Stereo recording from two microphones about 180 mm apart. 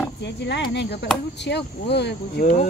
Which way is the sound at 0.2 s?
75° left (ahead or behind).